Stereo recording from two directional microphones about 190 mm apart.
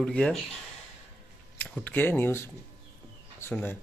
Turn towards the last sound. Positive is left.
turn(degrees=10)  # may be behind; listen again after turning